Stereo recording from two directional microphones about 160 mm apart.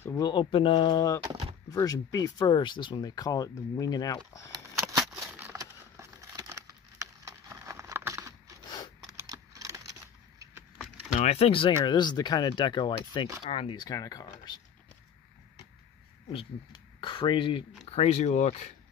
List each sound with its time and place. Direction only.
0.0 s speech: 15° left (ahead or behind)
0.3 s speech: 30° left (ahead or behind)
4.5 s a sound: 20° right (ahead or behind)
8.6 s a sound: 25° left (ahead or behind)
9.2 s computer keyboard: 20° right (ahead or behind)
11.1 s speech: 40° left (ahead or behind); by 14.2 s 25° left (ahead or behind)
16.3 s speech: 30° left (ahead or behind)